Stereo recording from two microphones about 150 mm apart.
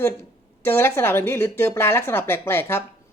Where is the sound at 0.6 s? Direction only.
15° left (ahead or behind).